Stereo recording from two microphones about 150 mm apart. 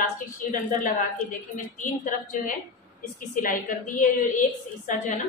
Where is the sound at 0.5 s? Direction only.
60° left (ahead or behind).